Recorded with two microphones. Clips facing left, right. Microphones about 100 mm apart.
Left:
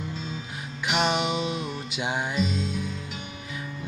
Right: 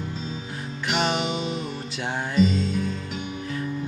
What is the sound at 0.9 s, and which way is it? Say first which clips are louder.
Music: even; 10° left (ahead or behind).